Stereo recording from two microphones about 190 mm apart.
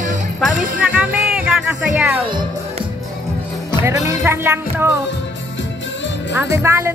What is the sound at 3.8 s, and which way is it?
Speech, 15° right (ahead or behind).